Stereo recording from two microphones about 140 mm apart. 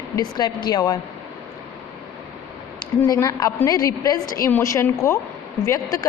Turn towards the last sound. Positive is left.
turn(degrees=25)  # may be behind; listen again after turning